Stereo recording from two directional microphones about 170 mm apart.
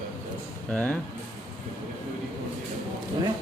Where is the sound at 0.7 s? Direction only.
10° left (ahead or behind).